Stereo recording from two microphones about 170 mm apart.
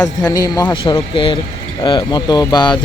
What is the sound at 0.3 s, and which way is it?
Speech, 20° left (ahead or behind).